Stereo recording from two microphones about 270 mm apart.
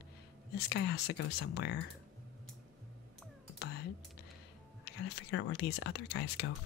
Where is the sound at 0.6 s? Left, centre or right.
Left.